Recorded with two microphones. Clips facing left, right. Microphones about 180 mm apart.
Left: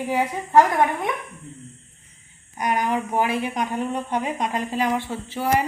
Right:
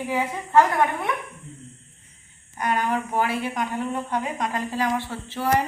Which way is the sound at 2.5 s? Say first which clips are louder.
Left 1 dB; 15° left (ahead or behind).